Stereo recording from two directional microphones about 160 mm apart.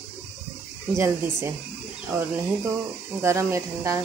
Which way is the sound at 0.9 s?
15° right (ahead or behind).